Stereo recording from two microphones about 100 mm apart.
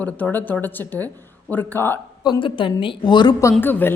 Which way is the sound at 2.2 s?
50° left (ahead or behind).